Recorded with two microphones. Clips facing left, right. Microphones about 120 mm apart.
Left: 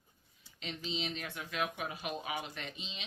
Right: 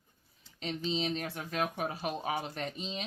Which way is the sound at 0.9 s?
40° right (ahead or behind).